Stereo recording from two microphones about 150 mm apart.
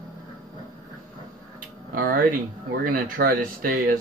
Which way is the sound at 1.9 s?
75° right (ahead or behind).